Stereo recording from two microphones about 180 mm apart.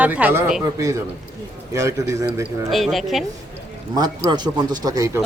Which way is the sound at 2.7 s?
Centre (ahead or behind).